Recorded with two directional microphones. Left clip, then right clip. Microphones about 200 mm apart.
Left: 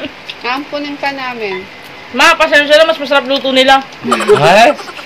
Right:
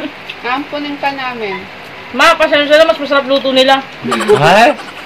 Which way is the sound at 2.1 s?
50° left (ahead or behind).